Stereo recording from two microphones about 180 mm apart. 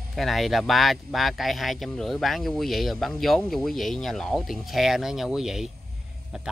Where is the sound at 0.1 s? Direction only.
Centre (ahead or behind).